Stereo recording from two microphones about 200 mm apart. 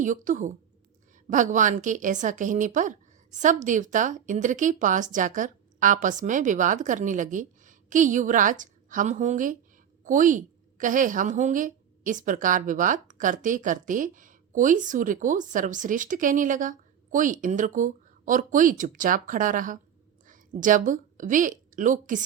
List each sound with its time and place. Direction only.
0.0 s a woman's voice: 40° right (ahead or behind)